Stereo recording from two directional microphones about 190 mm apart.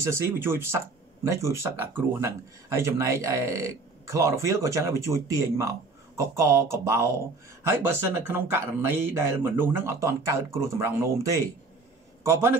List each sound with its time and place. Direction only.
0.0 s a man's voice: 15° right (ahead or behind)